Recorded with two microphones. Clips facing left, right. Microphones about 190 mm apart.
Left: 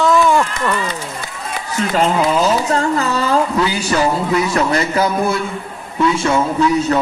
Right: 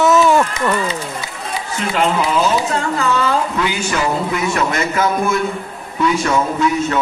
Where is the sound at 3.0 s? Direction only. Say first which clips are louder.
Left 1 dB; 35° left (ahead or behind).